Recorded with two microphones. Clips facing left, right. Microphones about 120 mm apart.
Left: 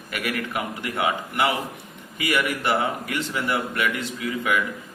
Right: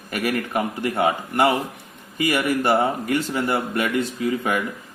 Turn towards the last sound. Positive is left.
turn(degrees=-35)  # may be behind; listen again after turning